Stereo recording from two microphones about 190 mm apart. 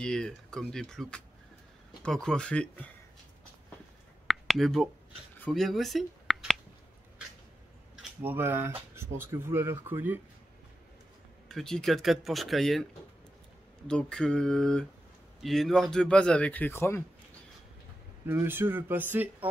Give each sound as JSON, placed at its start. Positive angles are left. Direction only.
{"t": 0.0, "sound": "speech", "side_deg": 5}
{"t": 4.3, "sound": "a sound", "side_deg": 0}
{"t": 5.4, "sound": "speech", "side_deg": 0}
{"t": 8.0, "sound": "speech", "side_deg": -10}
{"t": 11.4, "sound": "speech", "side_deg": 0}
{"t": 13.8, "sound": "speech", "side_deg": 5}
{"t": 18.2, "sound": "speech", "side_deg": -15}